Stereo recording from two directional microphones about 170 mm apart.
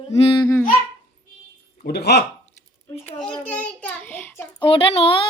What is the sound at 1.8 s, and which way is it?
Speech, 70° left (ahead or behind).